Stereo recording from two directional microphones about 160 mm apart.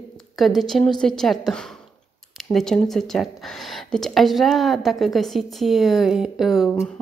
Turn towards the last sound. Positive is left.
turn(degrees=0)  # may be behind; listen again after turning